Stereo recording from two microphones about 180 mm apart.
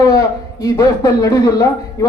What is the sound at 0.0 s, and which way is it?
A man's voice, 20° left (ahead or behind).